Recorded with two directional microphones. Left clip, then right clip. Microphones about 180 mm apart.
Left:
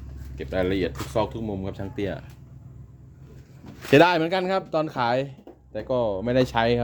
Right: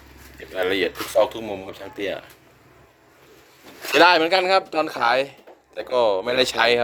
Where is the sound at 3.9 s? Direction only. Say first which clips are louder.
Right 3 dB; 30° left (ahead or behind).